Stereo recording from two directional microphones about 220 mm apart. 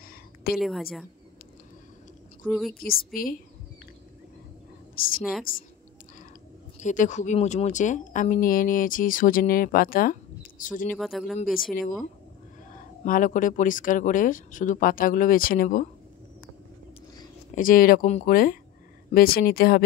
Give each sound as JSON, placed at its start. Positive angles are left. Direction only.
{"t": 0.6, "sound": "a woman's voice", "side_deg": 0}
{"t": 2.4, "sound": "a woman's voice", "side_deg": 5}
{"t": 3.1, "sound": "speech", "side_deg": 40}
{"t": 4.9, "sound": "speech", "side_deg": 40}
{"t": 6.8, "sound": "speech", "side_deg": 35}
{"t": 10.9, "sound": "a woman's voice", "side_deg": 0}
{"t": 11.7, "sound": "speech", "side_deg": 40}
{"t": 17.6, "sound": "speech", "side_deg": 40}